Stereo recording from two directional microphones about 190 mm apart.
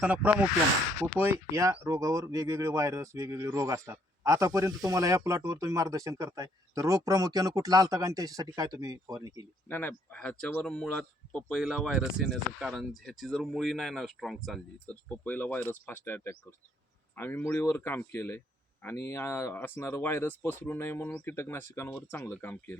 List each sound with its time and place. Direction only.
0.0 s speech: 5° right (ahead or behind)
9.6 s speech: 10° left (ahead or behind)